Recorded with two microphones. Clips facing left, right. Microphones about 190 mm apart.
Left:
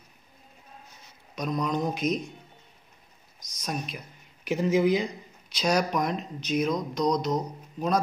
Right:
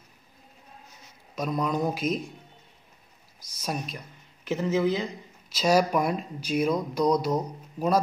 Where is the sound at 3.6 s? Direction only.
5° right (ahead or behind).